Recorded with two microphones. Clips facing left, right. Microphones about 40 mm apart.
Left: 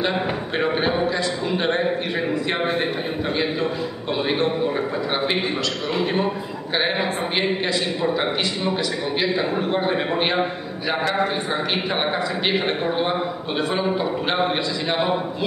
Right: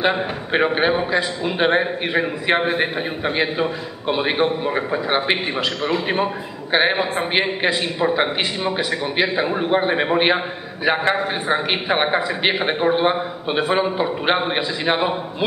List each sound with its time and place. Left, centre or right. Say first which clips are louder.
0.0 s a man's voice: right 2 dB; right
4.1 s a man's voice: right 3 dB; right